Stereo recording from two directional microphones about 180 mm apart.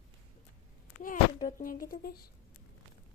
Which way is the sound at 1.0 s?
50° left (ahead or behind).